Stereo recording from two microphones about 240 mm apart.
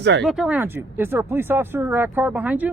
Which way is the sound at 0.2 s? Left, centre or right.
Centre.